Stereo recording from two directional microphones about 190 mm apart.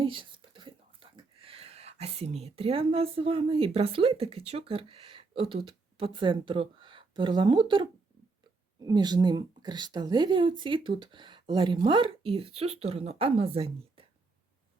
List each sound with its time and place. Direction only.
0.0 s a woman's voice: 25° right (ahead or behind)